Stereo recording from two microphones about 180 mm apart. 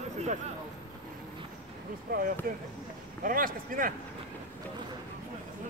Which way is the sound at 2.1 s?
55° right (ahead or behind).